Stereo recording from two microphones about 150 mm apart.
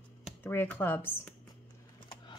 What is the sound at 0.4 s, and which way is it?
Speech, 15° left (ahead or behind).